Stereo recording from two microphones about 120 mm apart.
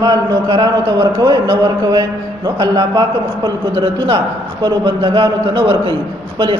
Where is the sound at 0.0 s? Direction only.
35° right (ahead or behind).